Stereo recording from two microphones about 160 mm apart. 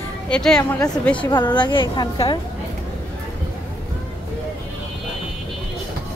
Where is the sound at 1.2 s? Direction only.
30° left (ahead or behind).